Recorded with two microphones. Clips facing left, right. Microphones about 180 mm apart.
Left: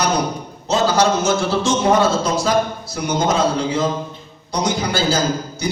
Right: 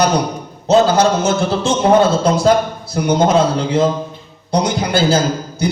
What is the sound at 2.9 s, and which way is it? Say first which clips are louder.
A man's voice: right 6 dB; 55° right (ahead or behind).